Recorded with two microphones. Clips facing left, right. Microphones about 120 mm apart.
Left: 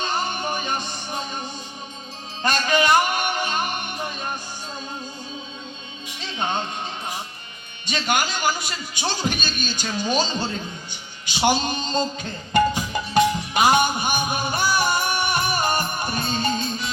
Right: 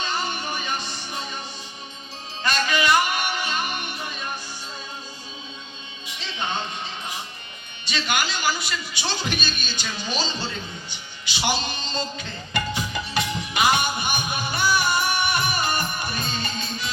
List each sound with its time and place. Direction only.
0.0 s music: 50° left (ahead or behind)
6.1 s music: 50° left (ahead or behind)
7.9 s a man's voice: 45° left (ahead or behind)
11.3 s music: 45° left (ahead or behind)